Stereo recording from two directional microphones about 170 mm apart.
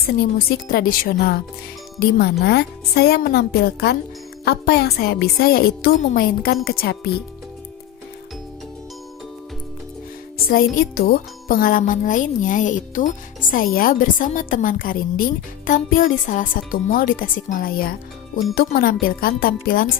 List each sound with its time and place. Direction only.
0.1 s a woman's voice: 60° left (ahead or behind)
10.3 s music: 60° left (ahead or behind)
10.8 s a woman's voice: 60° left (ahead or behind)